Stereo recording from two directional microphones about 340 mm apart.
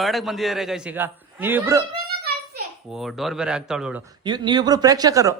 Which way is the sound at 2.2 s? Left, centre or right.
Right.